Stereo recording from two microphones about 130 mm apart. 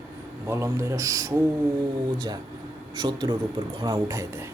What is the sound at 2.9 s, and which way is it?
A man's voice, 30° right (ahead or behind).